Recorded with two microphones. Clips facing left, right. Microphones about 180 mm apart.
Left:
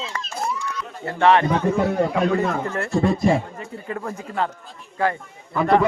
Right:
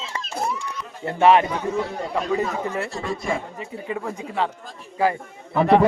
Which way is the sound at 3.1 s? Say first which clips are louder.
Left 4 dB; 40° left (ahead or behind).